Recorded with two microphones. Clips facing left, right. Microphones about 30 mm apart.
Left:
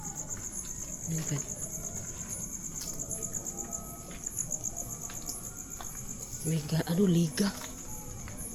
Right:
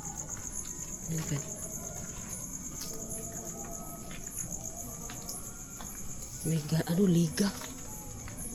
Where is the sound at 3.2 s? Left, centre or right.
Right.